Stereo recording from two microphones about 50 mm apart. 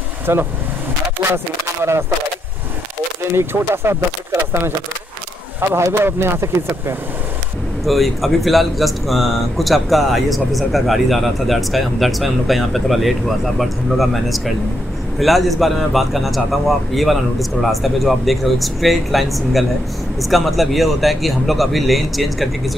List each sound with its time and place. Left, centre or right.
0.3 s speech: right
3.3 s speech: right
5.6 s speech: right
7.8 s speech: centre